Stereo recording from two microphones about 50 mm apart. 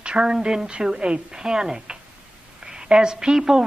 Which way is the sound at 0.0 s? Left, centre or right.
Centre.